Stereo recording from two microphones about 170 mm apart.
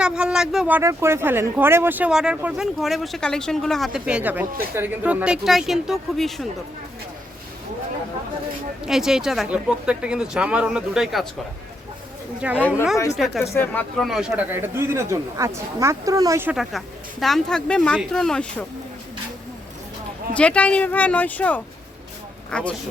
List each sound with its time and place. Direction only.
0.0 s speech: 5° right (ahead or behind)
0.8 s speech: 15° right (ahead or behind); by 6.5 s centre (ahead or behind)
8.9 s speech: 5° right (ahead or behind)
12.4 s speech: 10° right (ahead or behind)
13.4 s speech: 15° left (ahead or behind)
14.0 s speech: 5° right (ahead or behind)
16.6 s speech: centre (ahead or behind)
20.3 s speech: 5° left (ahead or behind)